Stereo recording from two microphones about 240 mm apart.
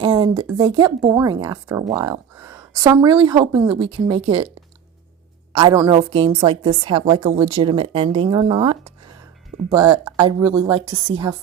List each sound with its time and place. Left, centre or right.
0.0 s a woman's voice: centre
5.5 s a woman's voice: centre